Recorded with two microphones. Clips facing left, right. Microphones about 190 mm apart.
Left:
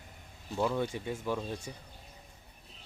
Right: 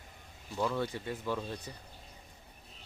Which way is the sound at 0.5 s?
15° left (ahead or behind).